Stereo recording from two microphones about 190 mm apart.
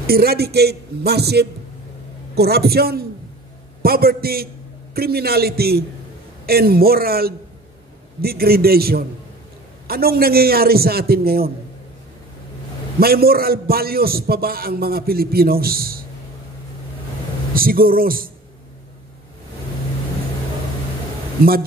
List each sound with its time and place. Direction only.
0.0 s a man's voice: 55° right (ahead or behind)
13.0 s a man's voice: 55° right (ahead or behind)
17.6 s a man's voice: 50° right (ahead or behind)